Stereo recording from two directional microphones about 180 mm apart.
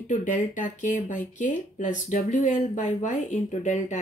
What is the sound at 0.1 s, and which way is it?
Speech, 45° left (ahead or behind).